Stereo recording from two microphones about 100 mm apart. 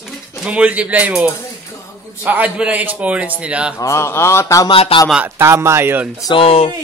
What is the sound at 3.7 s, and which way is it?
Speech, 30° left (ahead or behind).